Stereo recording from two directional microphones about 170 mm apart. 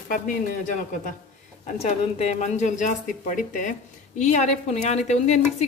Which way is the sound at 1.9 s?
40° left (ahead or behind).